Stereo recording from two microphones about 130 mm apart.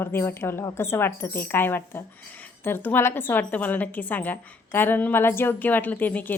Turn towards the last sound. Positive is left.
turn(degrees=15)  # may be behind; listen again after turning